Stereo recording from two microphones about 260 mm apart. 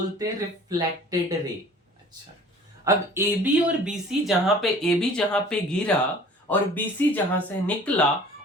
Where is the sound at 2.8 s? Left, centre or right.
Centre.